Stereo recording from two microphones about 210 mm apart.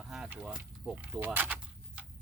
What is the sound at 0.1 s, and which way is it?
Speech, 5° right (ahead or behind).